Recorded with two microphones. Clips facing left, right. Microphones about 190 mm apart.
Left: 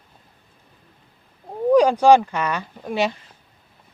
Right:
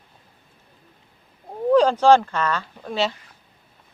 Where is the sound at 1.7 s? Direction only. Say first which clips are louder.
Left 1 dB; 15° left (ahead or behind).